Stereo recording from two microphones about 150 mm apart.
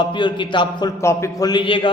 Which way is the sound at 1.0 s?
20° left (ahead or behind).